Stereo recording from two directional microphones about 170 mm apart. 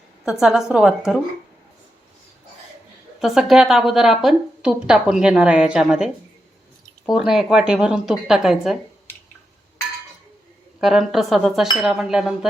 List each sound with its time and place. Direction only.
0.3 s a woman's voice: 5° right (ahead or behind)
3.2 s a woman's voice: centre (ahead or behind)
10.8 s a woman's voice: centre (ahead or behind)